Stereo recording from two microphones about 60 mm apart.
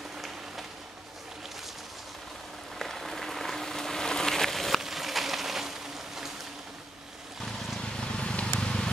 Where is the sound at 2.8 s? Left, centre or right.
Centre.